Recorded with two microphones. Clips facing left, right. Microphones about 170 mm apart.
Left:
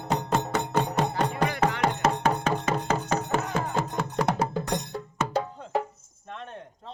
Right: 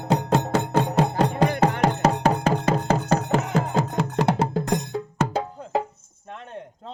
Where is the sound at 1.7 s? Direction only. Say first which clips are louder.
Right 4 dB; 50° right (ahead or behind).